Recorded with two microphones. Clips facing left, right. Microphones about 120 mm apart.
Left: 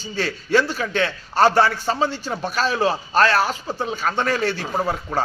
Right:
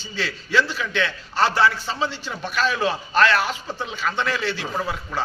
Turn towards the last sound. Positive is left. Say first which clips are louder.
# left 4 dB
turn(degrees=40)  # may be behind; listen again after turning